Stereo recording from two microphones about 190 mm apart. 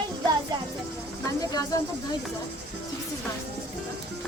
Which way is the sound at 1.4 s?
20° left (ahead or behind).